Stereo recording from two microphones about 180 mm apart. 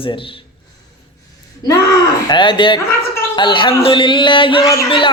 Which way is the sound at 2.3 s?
25° left (ahead or behind).